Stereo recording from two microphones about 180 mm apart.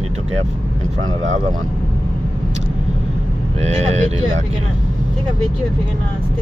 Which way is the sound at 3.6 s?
35° right (ahead or behind).